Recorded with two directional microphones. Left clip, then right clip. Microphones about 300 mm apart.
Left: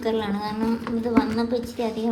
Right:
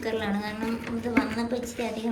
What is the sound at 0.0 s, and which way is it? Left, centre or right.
A woman's voice, left.